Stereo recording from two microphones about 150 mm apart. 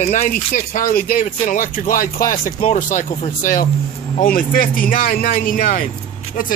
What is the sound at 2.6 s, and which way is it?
Speech, 55° left (ahead or behind).